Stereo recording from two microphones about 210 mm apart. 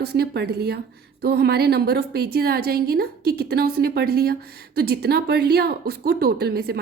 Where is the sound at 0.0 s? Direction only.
50° right (ahead or behind).